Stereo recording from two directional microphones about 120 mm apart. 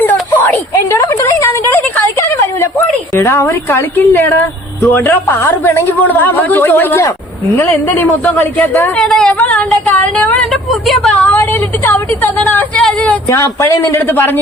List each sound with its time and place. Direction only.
0.0 s a sound: 15° left (ahead or behind)
2.6 s a woman's voice: 20° left (ahead or behind)
9.0 s speech: centre (ahead or behind)
9.8 s a sound: 10° left (ahead or behind)
10.2 s speech: 5° left (ahead or behind)
11.9 s a man's voice: 15° left (ahead or behind)
13.3 s a man's voice: 25° left (ahead or behind)